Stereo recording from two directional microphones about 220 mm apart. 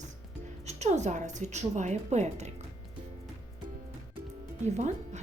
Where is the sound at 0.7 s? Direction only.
30° right (ahead or behind).